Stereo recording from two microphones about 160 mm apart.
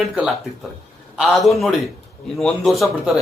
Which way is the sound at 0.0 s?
Centre (ahead or behind).